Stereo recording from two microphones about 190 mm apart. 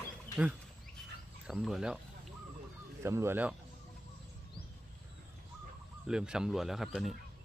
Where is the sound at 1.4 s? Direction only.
Centre (ahead or behind).